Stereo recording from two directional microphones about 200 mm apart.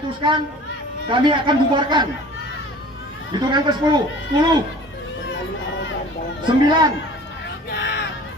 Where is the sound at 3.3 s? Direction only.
20° right (ahead or behind).